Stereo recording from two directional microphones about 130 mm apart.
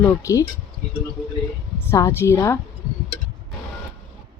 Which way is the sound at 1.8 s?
20° left (ahead or behind).